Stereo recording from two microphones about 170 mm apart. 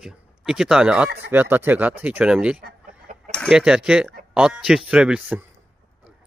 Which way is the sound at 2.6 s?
50° right (ahead or behind).